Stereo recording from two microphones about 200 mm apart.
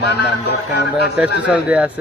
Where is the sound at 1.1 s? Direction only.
5° right (ahead or behind).